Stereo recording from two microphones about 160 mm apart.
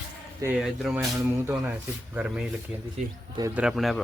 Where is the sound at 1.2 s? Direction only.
15° right (ahead or behind).